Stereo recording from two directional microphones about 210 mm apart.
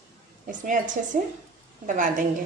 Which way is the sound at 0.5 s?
40° right (ahead or behind).